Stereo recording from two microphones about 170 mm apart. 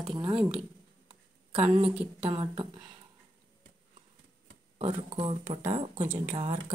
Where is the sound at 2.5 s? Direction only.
30° right (ahead or behind).